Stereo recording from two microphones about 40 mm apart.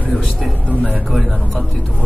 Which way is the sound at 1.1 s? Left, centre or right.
Centre.